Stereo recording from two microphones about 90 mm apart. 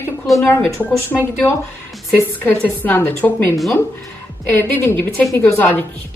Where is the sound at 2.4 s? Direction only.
20° left (ahead or behind).